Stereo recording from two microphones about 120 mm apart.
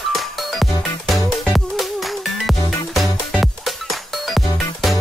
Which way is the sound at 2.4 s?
Centre (ahead or behind).